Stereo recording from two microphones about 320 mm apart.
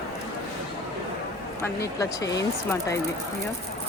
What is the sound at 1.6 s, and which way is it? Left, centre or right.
Speech, centre.